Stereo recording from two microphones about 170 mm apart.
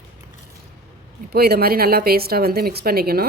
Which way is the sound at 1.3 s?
65° right (ahead or behind).